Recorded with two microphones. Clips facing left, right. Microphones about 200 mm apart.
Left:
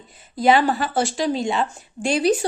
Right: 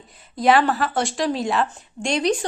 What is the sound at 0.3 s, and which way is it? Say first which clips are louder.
Speech: even; centre (ahead or behind).